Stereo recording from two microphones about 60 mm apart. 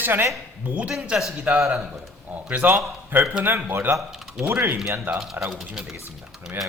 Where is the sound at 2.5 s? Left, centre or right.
Right.